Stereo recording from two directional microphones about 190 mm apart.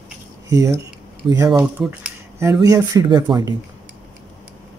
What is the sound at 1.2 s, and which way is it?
Speech, 20° right (ahead or behind).